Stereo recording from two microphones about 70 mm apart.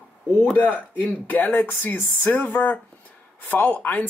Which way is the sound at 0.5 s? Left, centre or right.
Left.